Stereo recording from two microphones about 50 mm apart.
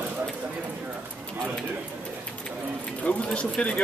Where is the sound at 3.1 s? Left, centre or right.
Left.